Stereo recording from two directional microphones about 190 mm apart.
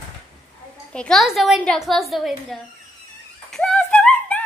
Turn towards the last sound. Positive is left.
turn(degrees=5)  # may be behind; listen again after turning